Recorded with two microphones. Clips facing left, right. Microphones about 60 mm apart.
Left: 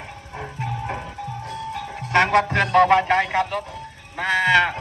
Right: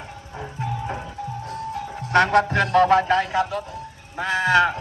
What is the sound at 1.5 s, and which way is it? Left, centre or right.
Music, left.